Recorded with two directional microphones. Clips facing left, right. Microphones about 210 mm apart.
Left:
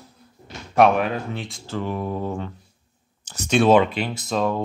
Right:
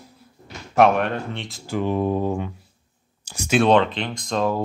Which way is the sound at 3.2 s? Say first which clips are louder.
Right 1 dB; 10° right (ahead or behind).